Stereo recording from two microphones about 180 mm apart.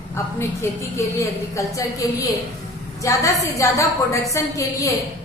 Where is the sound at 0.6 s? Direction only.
15° left (ahead or behind).